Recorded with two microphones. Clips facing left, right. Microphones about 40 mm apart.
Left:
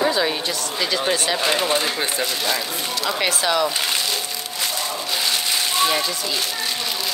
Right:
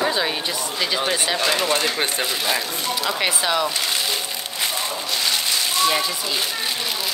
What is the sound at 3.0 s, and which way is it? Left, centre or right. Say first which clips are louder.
Speech: left 2 dB; centre.